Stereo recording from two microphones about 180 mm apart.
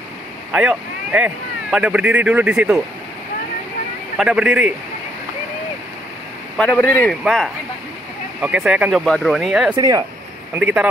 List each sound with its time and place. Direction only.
0.5 s speech: 5° right (ahead or behind)
4.2 s speech: 5° right (ahead or behind)
6.5 s speech: 5° left (ahead or behind)
7.2 s speech: centre (ahead or behind)
9.8 s speech: 20° right (ahead or behind)
10.5 s speech: 5° right (ahead or behind)